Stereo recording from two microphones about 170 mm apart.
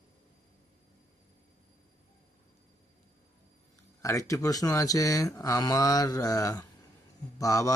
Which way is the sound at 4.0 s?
20° left (ahead or behind).